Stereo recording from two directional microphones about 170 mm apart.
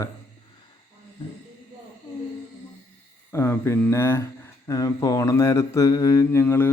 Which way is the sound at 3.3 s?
15° left (ahead or behind).